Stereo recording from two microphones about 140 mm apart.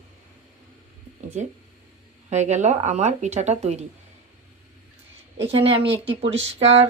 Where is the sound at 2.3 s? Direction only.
55° right (ahead or behind).